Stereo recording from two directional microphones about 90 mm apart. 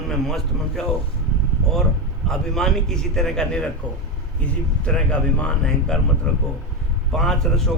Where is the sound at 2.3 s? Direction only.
5° left (ahead or behind).